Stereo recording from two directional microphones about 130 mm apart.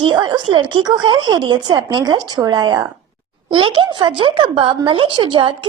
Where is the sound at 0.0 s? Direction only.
35° right (ahead or behind).